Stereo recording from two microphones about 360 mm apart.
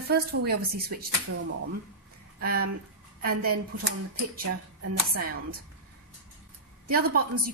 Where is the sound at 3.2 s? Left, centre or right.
Right.